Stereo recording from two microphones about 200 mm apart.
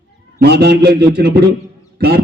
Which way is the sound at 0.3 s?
55° right (ahead or behind).